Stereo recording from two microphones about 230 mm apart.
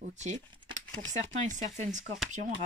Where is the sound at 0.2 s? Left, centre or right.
Right.